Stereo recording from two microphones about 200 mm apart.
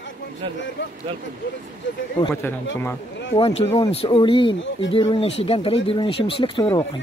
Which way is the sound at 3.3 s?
30° left (ahead or behind).